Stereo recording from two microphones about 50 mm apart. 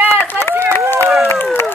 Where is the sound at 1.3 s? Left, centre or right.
Left.